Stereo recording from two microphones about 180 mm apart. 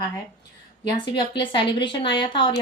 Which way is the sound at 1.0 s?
25° left (ahead or behind).